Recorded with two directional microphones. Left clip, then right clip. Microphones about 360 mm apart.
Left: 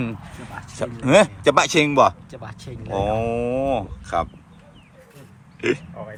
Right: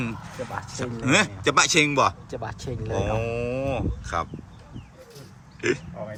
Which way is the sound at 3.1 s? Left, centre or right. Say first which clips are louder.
Left 5 dB; centre.